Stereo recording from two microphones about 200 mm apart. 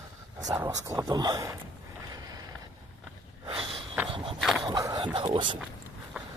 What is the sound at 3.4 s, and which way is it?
Snort, 25° right (ahead or behind).